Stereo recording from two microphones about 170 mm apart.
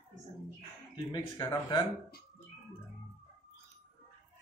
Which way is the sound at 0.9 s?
20° left (ahead or behind).